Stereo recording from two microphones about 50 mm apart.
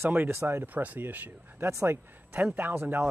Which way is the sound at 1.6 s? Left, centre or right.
Right.